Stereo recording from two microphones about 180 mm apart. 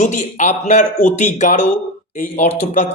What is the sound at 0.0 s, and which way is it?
A man's voice, 40° left (ahead or behind).